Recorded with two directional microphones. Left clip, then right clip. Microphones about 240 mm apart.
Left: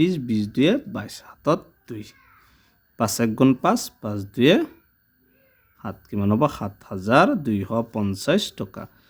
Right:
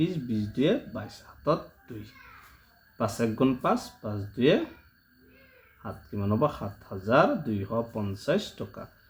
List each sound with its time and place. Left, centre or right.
0.0 s speech: left
5.8 s speech: left